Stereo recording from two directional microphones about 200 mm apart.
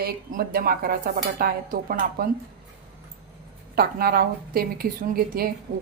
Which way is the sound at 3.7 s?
50° right (ahead or behind).